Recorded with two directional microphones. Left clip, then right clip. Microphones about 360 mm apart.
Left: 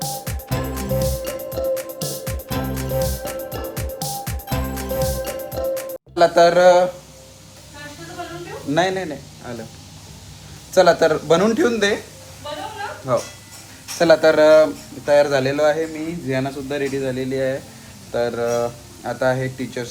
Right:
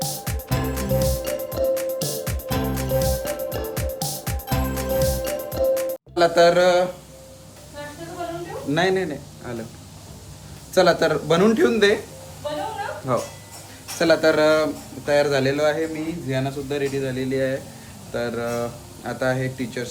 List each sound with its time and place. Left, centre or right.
0.0 s music: centre
8.7 s speech: centre
10.7 s speech: centre
13.1 s speech: centre
16.3 s a man's voice: centre
17.2 s speech: centre